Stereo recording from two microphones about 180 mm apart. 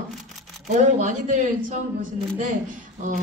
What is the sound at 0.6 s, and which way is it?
Speech, 45° right (ahead or behind).